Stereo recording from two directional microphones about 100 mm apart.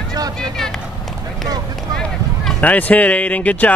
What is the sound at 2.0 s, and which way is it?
Speech, 10° left (ahead or behind).